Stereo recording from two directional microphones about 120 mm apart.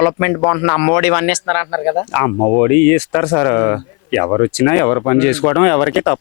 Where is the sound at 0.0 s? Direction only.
15° left (ahead or behind).